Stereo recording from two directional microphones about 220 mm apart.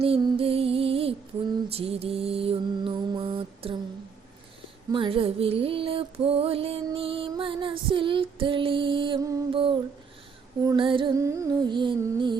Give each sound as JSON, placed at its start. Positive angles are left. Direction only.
{"t": 0.0, "sound": "music", "side_deg": -25}
{"t": 4.9, "sound": "music", "side_deg": -25}